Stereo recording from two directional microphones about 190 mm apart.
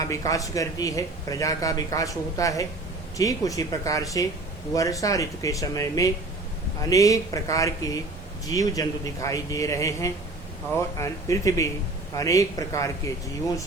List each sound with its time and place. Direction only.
0.0 s speech: 15° left (ahead or behind)